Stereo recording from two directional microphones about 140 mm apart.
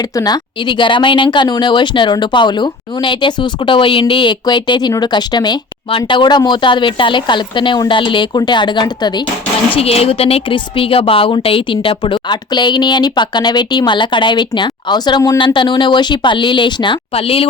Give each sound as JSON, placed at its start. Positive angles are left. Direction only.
{"t": 0.2, "sound": "a woman's voice", "side_deg": 30}
{"t": 9.7, "sound": "a woman's voice", "side_deg": 45}